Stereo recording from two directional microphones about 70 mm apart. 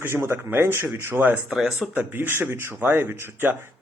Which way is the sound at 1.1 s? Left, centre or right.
Right.